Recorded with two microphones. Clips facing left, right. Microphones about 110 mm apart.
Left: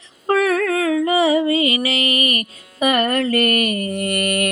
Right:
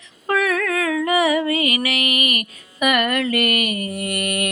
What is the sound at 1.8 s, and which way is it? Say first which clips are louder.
Music: left 2 dB; 30° left (ahead or behind).